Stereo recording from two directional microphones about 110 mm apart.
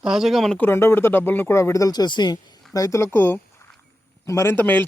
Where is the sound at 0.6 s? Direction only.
20° left (ahead or behind).